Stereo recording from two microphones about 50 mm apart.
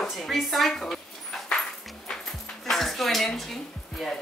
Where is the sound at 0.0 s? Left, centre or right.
Centre.